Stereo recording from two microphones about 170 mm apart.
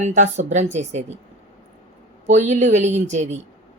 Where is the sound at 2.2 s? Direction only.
40° right (ahead or behind).